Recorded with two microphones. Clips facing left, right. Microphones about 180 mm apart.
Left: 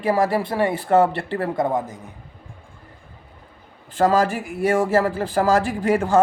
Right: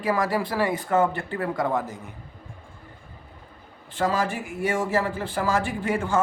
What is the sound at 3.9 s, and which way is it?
Speech, 40° left (ahead or behind).